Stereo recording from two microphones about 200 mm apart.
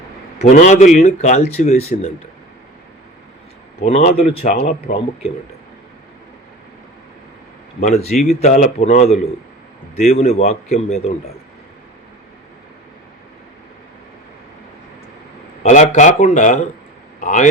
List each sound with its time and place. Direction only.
0.3 s speech: 35° left (ahead or behind)
3.8 s speech: 35° left (ahead or behind)
7.8 s speech: 35° left (ahead or behind)
15.6 s speech: 35° left (ahead or behind)